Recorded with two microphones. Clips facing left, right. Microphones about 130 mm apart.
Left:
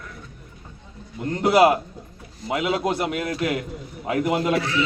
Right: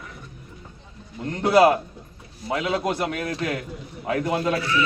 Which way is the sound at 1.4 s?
20° left (ahead or behind).